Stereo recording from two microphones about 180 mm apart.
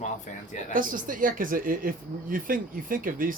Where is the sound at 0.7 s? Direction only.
50° right (ahead or behind).